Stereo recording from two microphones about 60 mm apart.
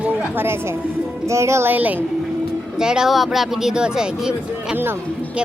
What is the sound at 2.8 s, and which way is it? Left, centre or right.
A woman's voice, centre.